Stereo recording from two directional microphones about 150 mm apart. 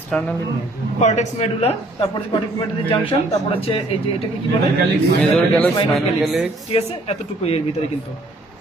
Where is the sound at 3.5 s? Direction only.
40° left (ahead or behind).